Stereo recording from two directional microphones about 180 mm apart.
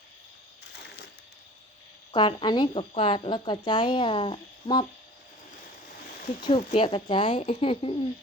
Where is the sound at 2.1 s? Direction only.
25° left (ahead or behind).